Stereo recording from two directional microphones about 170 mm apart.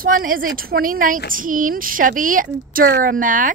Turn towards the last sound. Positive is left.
turn(degrees=-50)  # may be behind; listen again after turning